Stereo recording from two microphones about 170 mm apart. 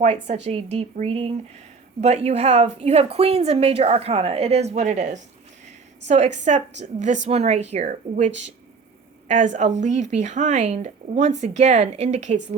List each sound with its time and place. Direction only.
0.0 s speech: 40° right (ahead or behind)